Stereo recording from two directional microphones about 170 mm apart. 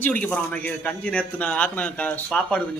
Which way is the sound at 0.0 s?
10° left (ahead or behind).